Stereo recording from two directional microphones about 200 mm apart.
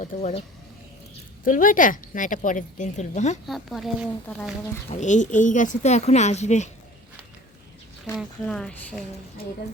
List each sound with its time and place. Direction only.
0.0 s a woman's voice: 35° left (ahead or behind)
1.5 s a woman's voice: 40° left (ahead or behind)
3.4 s speech: centre (ahead or behind)
4.9 s a woman's voice: 35° left (ahead or behind)
8.2 s speech: 5° left (ahead or behind)